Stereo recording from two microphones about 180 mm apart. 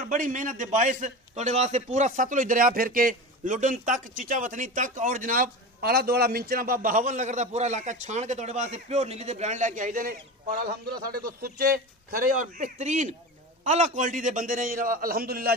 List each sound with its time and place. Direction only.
0.0 s a man's voice: 45° right (ahead or behind)